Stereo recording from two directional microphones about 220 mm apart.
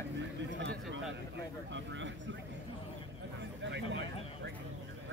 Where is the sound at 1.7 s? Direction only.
55° right (ahead or behind).